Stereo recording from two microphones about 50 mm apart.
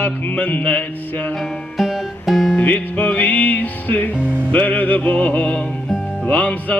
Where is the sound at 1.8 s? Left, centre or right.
Centre.